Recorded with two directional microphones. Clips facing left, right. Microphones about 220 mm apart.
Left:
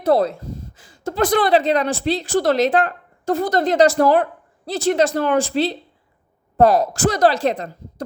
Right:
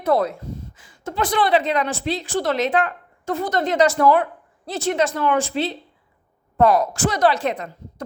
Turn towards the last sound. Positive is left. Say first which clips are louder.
# left 3 dB
turn(degrees=35)  # may be behind; listen again after turning